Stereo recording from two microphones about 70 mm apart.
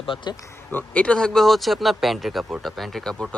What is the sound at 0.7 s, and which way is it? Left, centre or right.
Speech, left.